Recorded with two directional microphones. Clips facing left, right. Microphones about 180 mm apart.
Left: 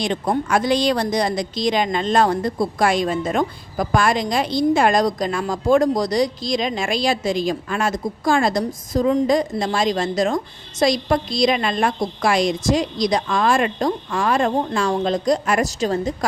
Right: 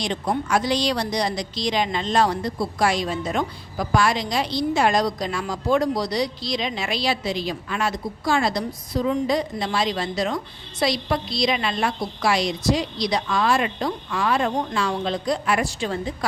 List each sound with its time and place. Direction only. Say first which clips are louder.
0.0 s speech: left 4 dB; 50° left (ahead or behind)